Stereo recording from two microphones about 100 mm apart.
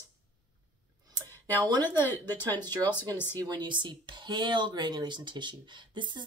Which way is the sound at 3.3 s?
45° right (ahead or behind).